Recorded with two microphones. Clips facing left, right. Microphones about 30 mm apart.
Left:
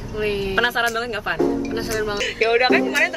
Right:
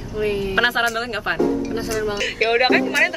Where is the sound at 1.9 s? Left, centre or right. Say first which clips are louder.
Right 1 dB; centre.